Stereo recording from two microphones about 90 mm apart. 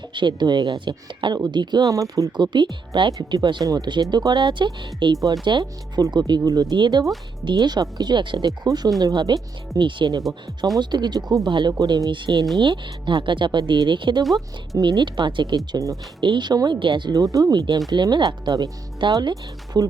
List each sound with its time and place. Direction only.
0.1 s speech: 60° right (ahead or behind)
1.9 s speech: 40° right (ahead or behind)
2.3 s speech: 55° right (ahead or behind)
5.1 s speech: 40° right (ahead or behind)
6.0 s speech: 50° right (ahead or behind)
8.4 s speech: 45° right (ahead or behind)
11.8 s speech: 45° right (ahead or behind)
17.5 s speech: 55° right (ahead or behind)